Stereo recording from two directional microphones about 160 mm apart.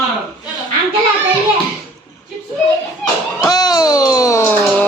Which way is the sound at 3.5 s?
25° left (ahead or behind).